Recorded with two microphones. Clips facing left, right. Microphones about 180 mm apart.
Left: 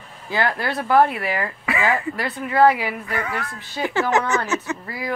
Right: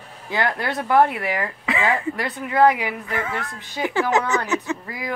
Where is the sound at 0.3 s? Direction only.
20° right (ahead or behind).